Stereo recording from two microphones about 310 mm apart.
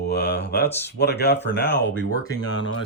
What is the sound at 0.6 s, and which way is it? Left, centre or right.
Speech, centre.